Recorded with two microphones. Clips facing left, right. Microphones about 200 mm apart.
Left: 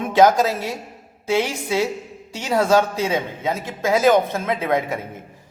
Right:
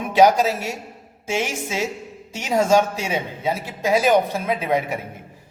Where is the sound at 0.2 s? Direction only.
15° right (ahead or behind).